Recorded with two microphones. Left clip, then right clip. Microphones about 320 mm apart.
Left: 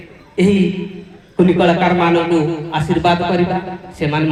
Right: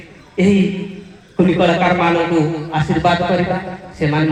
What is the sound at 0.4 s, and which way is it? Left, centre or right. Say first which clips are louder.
A man's voice: left 1 dB; centre.